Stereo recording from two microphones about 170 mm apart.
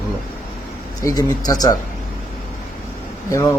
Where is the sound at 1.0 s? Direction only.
20° left (ahead or behind).